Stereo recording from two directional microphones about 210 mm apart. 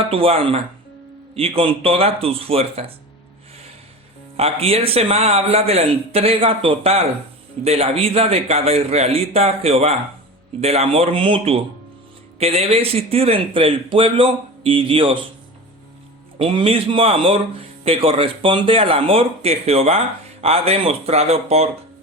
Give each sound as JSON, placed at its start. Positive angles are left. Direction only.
{"t": 0.1, "sound": "speech", "side_deg": -25}
{"t": 4.4, "sound": "speech", "side_deg": -30}
{"t": 16.4, "sound": "speech", "side_deg": -25}